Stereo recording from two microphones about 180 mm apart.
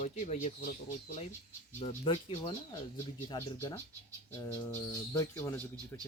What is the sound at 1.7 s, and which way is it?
Speech, 35° left (ahead or behind).